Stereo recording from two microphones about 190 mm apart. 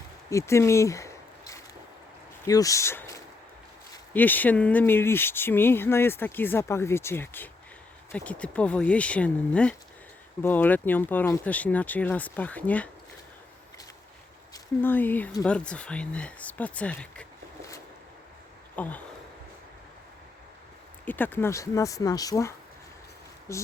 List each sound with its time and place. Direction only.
0.3 s a sound: 15° left (ahead or behind)
2.5 s speech: 20° left (ahead or behind)
14.5 s speech: 10° left (ahead or behind)
18.8 s speech: 10° left (ahead or behind)
21.0 s speech: 10° left (ahead or behind)